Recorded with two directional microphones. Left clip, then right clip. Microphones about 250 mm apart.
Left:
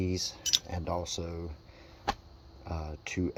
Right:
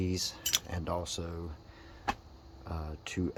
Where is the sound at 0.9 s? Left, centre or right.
Centre.